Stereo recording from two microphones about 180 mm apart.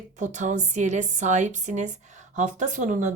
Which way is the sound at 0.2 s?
45° right (ahead or behind).